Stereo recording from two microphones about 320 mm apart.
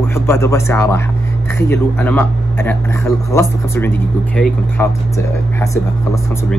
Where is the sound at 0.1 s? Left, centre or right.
Centre.